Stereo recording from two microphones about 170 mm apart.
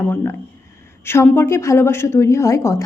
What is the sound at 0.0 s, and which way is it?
A woman's voice, 10° left (ahead or behind).